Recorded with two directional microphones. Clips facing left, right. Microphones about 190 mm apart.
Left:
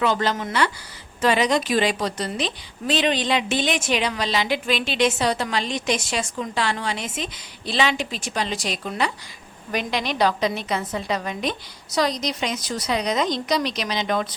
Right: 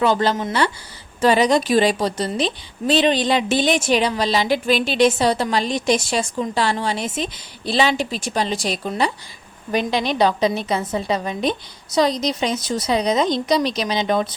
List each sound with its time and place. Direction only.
0.0 s a woman's voice: 35° right (ahead or behind)